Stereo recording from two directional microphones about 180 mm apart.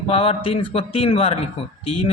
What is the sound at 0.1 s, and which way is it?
Speech, 30° left (ahead or behind).